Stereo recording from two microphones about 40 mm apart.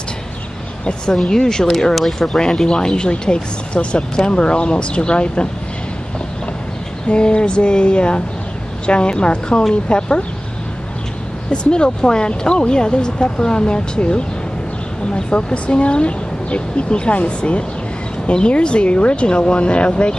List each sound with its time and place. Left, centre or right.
1.1 s speech: centre
7.1 s speech: left
11.5 s speech: left